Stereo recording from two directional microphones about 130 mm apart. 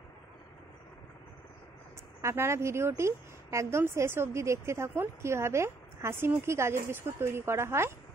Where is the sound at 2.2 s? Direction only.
20° right (ahead or behind).